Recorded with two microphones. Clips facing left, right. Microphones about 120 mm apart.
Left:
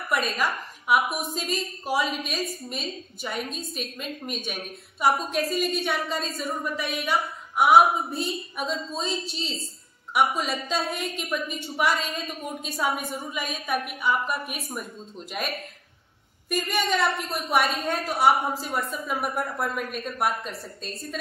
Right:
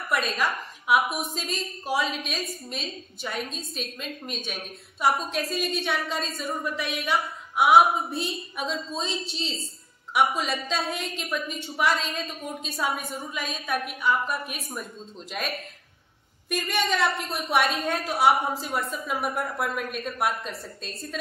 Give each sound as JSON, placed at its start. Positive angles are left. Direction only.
{"t": 0.1, "sound": "a woman's voice", "side_deg": 0}